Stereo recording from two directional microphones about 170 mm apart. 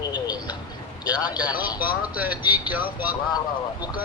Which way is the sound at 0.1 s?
25° left (ahead or behind).